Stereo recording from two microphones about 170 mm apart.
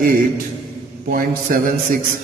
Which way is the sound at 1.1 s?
55° right (ahead or behind).